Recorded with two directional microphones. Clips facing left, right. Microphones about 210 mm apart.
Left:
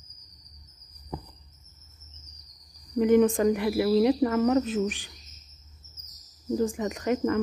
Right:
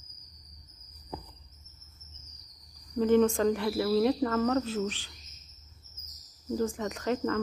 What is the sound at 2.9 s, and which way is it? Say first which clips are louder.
Speech: left 3 dB; 15° left (ahead or behind).